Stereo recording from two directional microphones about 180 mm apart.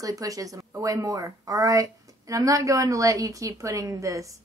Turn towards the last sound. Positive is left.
turn(degrees=-15)  # may be behind; listen again after turning